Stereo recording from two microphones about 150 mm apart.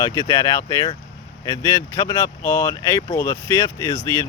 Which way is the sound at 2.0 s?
20° left (ahead or behind).